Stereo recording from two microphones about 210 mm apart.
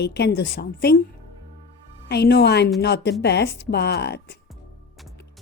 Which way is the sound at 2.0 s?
50° left (ahead or behind).